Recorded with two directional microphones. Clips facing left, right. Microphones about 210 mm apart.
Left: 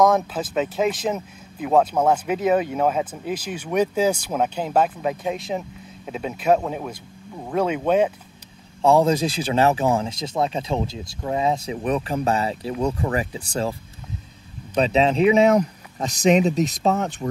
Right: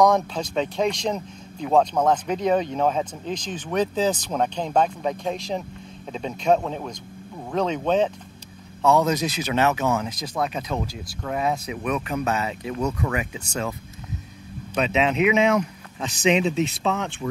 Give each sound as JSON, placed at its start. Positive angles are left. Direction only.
{"t": 0.0, "sound": "speech", "side_deg": 5}
{"t": 8.8, "sound": "speech", "side_deg": 30}
{"t": 14.8, "sound": "speech", "side_deg": 35}